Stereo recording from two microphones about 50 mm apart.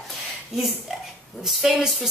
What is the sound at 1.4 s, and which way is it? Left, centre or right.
Speech, centre.